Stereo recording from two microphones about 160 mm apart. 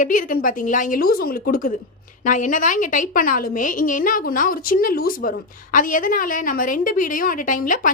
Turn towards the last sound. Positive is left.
turn(degrees=60)  # may be behind; listen again after turning